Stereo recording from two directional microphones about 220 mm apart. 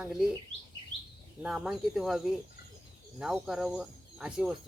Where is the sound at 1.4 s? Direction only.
5° right (ahead or behind).